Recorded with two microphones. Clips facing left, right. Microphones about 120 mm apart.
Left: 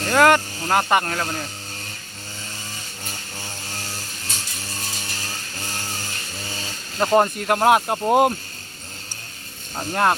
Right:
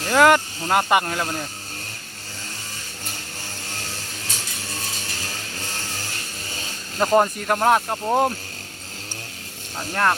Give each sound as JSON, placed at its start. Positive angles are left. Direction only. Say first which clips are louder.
{"t": 0.0, "sound": "speech", "louder": "even", "side_deg": -5}
{"t": 7.0, "sound": "speech", "louder": "even", "side_deg": 0}
{"t": 9.7, "sound": "speech", "louder": "left 2 dB", "side_deg": 20}